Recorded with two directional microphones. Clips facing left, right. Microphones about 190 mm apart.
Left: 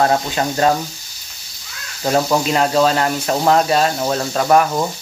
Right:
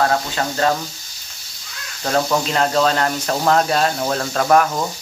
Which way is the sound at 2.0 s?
15° left (ahead or behind).